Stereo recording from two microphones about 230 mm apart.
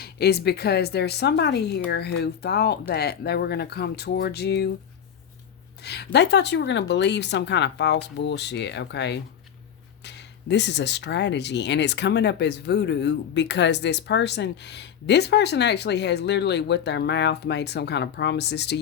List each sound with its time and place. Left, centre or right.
0.0 s speech: left
5.8 s speech: left